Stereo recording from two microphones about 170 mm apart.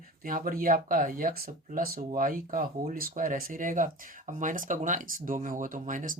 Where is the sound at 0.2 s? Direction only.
55° right (ahead or behind).